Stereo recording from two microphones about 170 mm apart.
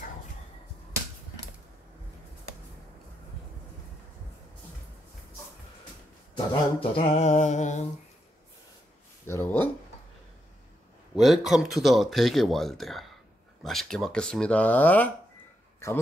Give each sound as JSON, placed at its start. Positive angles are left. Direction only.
{"t": 6.3, "sound": "a sound", "side_deg": 35}
{"t": 9.2, "sound": "speech", "side_deg": 15}
{"t": 11.1, "sound": "speech", "side_deg": 0}